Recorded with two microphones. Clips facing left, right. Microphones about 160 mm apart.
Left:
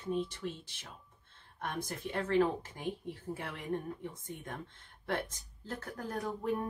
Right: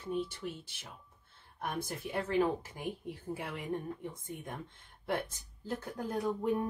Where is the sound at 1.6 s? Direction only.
10° right (ahead or behind).